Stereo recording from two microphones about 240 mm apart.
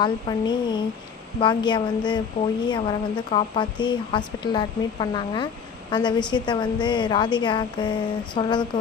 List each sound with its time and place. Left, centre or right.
0.0 s a woman's voice: centre